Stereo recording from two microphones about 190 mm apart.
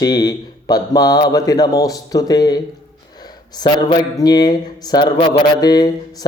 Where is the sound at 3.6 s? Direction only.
20° left (ahead or behind).